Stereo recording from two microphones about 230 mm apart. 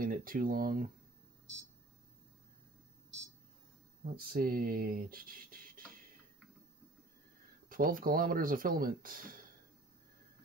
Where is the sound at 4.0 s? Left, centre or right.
Right.